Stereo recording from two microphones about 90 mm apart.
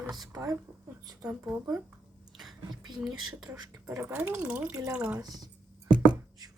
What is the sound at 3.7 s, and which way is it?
Speech, 30° right (ahead or behind).